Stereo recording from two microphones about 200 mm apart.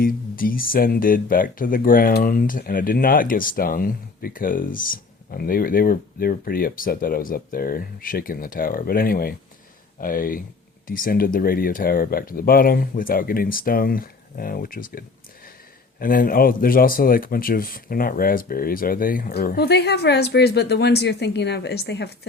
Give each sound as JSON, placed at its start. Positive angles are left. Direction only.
{"t": 0.0, "sound": "speech", "side_deg": 45}